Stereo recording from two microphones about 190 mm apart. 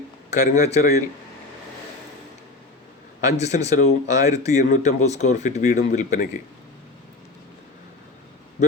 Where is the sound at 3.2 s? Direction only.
35° left (ahead or behind).